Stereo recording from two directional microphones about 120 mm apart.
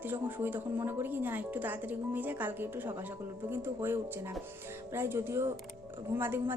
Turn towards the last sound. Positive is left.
turn(degrees=-20)  # may be behind; listen again after turning